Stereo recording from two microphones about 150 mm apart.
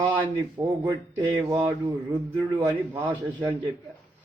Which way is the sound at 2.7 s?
10° right (ahead or behind).